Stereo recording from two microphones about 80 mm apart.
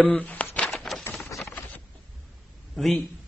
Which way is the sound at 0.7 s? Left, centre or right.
Centre.